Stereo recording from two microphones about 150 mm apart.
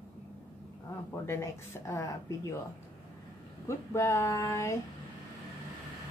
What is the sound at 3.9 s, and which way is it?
Speech, 20° left (ahead or behind).